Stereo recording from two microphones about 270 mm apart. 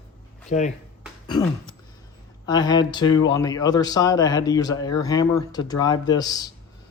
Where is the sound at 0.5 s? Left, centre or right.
Left.